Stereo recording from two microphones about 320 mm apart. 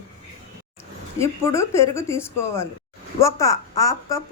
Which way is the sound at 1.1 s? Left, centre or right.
Centre.